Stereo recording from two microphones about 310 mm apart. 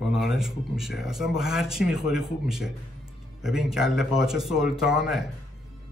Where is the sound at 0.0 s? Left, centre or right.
Centre.